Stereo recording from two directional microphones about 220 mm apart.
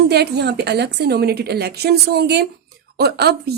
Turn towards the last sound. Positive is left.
turn(degrees=-45)  # may be behind; listen again after turning